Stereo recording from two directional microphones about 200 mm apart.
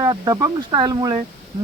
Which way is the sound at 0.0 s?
20° right (ahead or behind).